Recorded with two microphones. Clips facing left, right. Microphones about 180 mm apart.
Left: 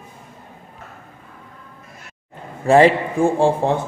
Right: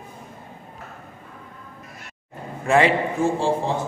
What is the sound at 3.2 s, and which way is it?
Speech, 55° left (ahead or behind).